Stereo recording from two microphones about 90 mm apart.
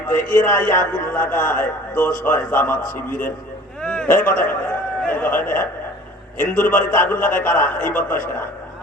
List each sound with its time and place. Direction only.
0.1 s a man's voice: 25° left (ahead or behind)
3.8 s a sound: 10° left (ahead or behind)
4.1 s a man's voice: 25° left (ahead or behind)